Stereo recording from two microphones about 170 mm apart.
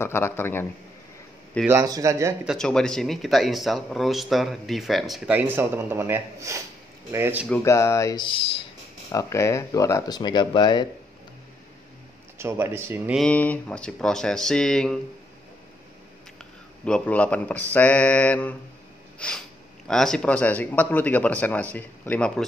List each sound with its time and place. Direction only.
0.0 s speech: 15° left (ahead or behind)
1.7 s speech: 20° right (ahead or behind)
2.4 s speech: 5° left (ahead or behind); by 7.4 s 15° right (ahead or behind)
7.4 s speech: 15° left (ahead or behind); by 8.6 s 30° left (ahead or behind)
9.1 s speech: 15° left (ahead or behind)
12.4 s speech: 15° right (ahead or behind)
13.1 s speech: 5° left (ahead or behind)
16.8 s speech: 5° left (ahead or behind)
19.1 s snort: 5° left (ahead or behind)
19.9 s speech: 5° left (ahead or behind)